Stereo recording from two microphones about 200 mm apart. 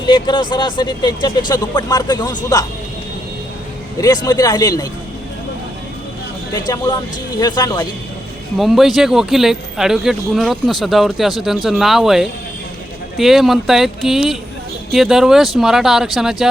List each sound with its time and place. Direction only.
0.0 s speech: 20° left (ahead or behind)
4.0 s speech: 20° left (ahead or behind)
6.7 s speech: 20° left (ahead or behind)
8.5 s speech: centre (ahead or behind)